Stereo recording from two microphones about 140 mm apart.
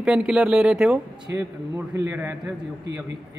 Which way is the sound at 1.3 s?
20° right (ahead or behind).